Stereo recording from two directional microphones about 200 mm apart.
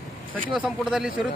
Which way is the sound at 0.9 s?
5° right (ahead or behind).